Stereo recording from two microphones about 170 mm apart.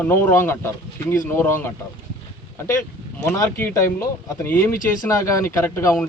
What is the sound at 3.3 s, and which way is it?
Speech, 20° left (ahead or behind).